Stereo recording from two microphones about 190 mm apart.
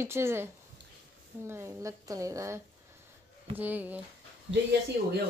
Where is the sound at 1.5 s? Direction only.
15° right (ahead or behind).